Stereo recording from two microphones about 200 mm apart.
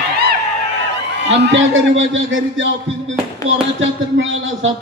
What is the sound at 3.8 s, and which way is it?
Speech, 75° right (ahead or behind).